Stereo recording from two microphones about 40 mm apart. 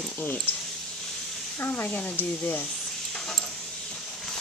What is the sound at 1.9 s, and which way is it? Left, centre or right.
Speech, left.